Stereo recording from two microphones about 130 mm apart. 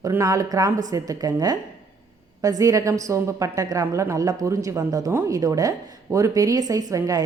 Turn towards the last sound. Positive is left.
turn(degrees=-25)  # may be behind; listen again after turning